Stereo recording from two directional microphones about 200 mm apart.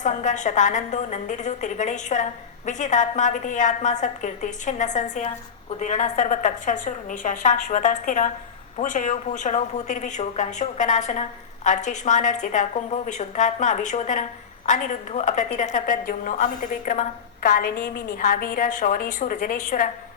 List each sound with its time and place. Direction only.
0.0 s a woman's voice: 40° left (ahead or behind)